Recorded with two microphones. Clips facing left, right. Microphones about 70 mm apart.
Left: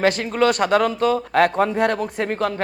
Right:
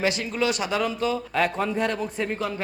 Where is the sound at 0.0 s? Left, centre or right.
Left.